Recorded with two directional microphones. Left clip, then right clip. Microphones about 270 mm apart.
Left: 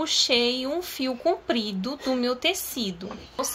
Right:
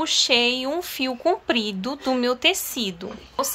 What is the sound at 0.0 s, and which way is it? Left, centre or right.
Speech, centre.